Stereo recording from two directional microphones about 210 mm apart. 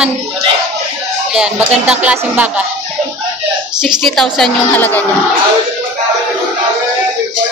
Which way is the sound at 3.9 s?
Centre (ahead or behind).